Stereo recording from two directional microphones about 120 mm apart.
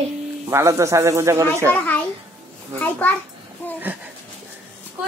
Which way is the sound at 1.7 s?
15° left (ahead or behind).